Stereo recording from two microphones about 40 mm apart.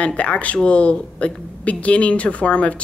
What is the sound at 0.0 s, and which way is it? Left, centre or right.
A woman's voice, left.